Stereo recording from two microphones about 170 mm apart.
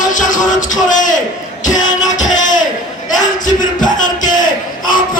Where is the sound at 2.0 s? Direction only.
45° left (ahead or behind).